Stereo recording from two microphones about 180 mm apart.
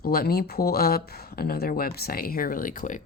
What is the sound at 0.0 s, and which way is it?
Speech, 55° left (ahead or behind).